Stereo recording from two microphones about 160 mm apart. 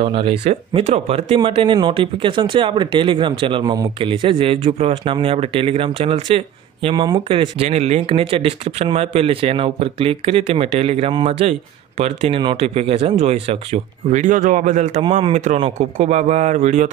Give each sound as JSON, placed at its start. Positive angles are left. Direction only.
{"t": 0.0, "sound": "speech", "side_deg": -35}
{"t": 15.0, "sound": "speech", "side_deg": -30}
{"t": 15.3, "sound": "speech", "side_deg": -50}